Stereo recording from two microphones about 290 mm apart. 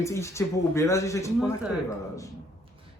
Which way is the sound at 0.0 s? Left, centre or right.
Centre.